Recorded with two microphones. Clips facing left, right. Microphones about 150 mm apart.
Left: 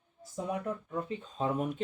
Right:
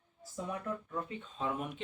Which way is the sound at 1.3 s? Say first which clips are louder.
Left 5 dB; 35° left (ahead or behind).